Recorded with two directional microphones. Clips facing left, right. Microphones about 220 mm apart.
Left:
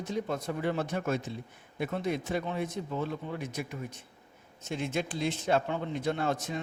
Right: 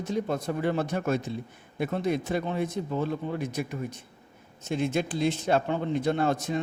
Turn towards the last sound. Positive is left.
turn(degrees=-35)  # may be behind; listen again after turning